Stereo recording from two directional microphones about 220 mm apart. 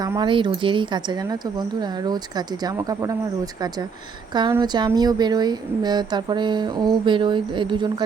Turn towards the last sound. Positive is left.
turn(degrees=-20)  # may be behind; listen again after turning